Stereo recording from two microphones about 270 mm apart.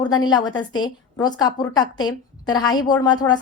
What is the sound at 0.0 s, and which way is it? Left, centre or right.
A woman's voice, centre.